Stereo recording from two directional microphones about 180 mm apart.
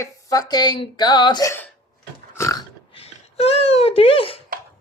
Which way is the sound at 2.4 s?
15° left (ahead or behind).